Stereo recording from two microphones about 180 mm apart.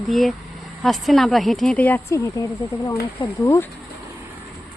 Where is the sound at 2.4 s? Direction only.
20° left (ahead or behind).